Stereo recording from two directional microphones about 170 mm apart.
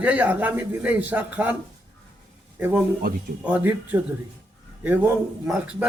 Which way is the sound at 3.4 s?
10° right (ahead or behind).